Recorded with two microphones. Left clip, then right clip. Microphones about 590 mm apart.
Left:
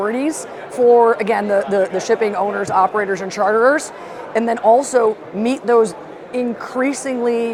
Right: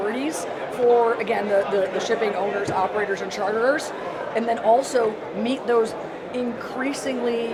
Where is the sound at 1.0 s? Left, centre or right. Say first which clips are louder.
Left 7 dB; left.